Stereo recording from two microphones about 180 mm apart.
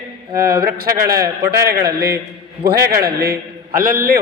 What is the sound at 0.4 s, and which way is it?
A man's voice, 55° right (ahead or behind).